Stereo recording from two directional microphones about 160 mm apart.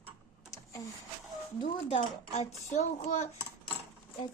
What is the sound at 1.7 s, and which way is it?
Speech, 40° left (ahead or behind).